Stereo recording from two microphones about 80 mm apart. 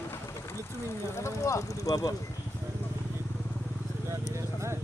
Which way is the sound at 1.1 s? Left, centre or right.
Left.